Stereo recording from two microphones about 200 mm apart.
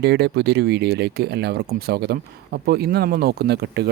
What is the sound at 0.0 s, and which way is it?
Speech, 55° right (ahead or behind).